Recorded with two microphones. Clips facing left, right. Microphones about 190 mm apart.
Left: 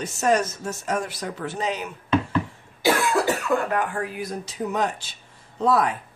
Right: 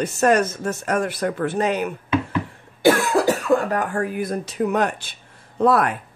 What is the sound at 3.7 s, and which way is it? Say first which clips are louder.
Speech: right 3 dB; 45° right (ahead or behind).